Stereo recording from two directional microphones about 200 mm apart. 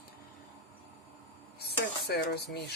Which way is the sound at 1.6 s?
55° left (ahead or behind).